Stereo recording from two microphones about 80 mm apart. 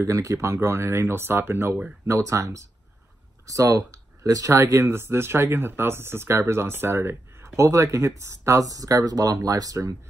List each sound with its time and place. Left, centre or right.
0.0 s speech: right
4.6 s speech: right